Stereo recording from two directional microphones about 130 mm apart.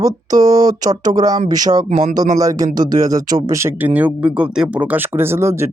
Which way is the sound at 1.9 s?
70° right (ahead or behind).